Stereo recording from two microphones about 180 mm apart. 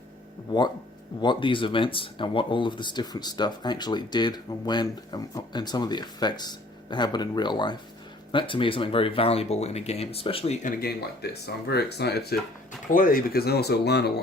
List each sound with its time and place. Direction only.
1.2 s speech: 25° left (ahead or behind); by 12.4 s 60° left (ahead or behind)
12.9 s speech: 50° left (ahead or behind)